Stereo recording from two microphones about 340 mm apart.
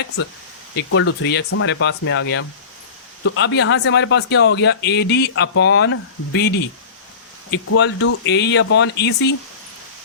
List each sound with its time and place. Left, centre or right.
0.8 s speech: left